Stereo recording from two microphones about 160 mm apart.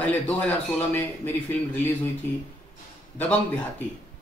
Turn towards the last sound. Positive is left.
turn(degrees=10)  # may be behind; listen again after turning